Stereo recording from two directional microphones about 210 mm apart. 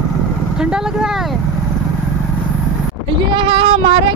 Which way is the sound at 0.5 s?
5° right (ahead or behind).